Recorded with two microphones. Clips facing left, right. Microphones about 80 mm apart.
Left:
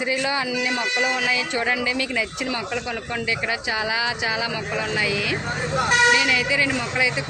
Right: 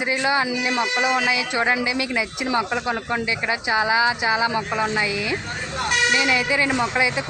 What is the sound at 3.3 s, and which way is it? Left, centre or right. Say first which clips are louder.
Speech: even; centre.